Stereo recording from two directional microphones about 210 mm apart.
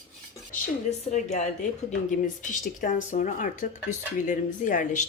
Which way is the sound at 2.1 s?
40° left (ahead or behind).